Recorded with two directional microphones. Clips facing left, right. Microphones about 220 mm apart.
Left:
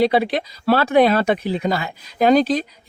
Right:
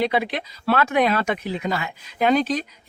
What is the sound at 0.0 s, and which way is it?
Speech, 35° left (ahead or behind).